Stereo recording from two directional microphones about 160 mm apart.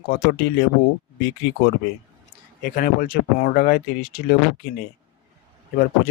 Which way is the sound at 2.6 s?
60° left (ahead or behind).